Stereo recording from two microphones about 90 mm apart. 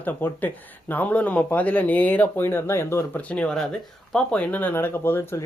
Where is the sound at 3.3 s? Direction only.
10° left (ahead or behind).